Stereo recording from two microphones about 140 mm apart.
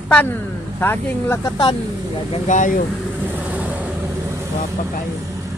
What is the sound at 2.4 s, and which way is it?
Speech, 65° left (ahead or behind).